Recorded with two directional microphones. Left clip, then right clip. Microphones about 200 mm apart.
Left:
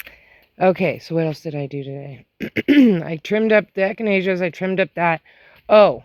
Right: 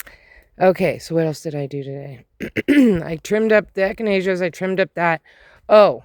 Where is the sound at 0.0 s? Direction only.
35° right (ahead or behind).